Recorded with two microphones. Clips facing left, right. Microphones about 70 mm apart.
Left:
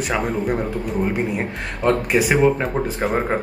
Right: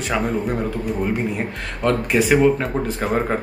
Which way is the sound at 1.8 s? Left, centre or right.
Centre.